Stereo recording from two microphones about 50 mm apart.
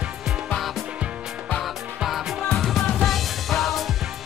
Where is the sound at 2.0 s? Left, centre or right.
Centre.